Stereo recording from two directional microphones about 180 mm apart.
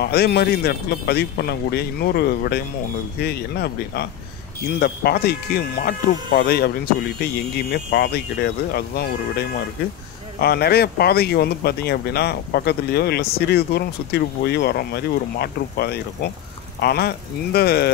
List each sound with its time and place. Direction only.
0.0 s speech: 60° left (ahead or behind)
10.4 s speech: 60° left (ahead or behind)